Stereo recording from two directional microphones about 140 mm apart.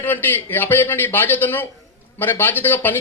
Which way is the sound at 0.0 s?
15° left (ahead or behind).